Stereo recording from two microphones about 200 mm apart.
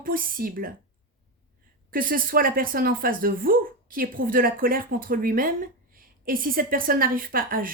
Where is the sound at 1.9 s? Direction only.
45° right (ahead or behind).